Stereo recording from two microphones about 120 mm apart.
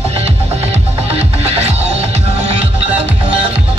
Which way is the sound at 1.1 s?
60° right (ahead or behind).